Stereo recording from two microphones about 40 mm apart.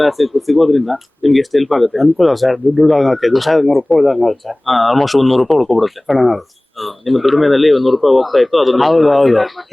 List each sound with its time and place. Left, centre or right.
0.0 s speech: centre